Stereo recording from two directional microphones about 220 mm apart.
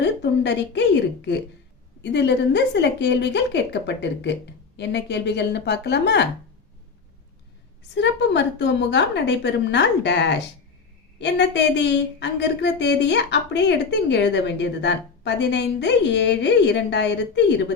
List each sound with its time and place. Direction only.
0.0 s a woman's voice: 50° left (ahead or behind)
7.9 s a woman's voice: 50° left (ahead or behind)